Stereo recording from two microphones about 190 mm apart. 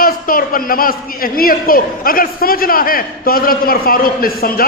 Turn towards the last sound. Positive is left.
turn(degrees=50)  # may be behind; listen again after turning